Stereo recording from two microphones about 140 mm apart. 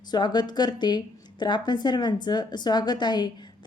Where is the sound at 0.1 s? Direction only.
30° left (ahead or behind).